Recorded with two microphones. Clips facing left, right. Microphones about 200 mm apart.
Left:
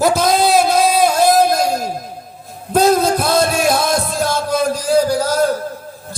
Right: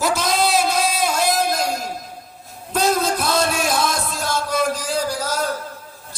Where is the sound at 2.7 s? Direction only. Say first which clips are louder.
Left 7 dB; 55° left (ahead or behind).